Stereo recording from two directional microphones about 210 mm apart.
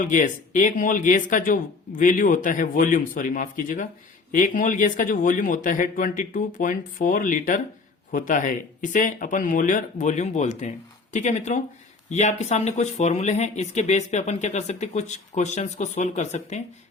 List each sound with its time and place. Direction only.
0.0 s speech: 40° left (ahead or behind)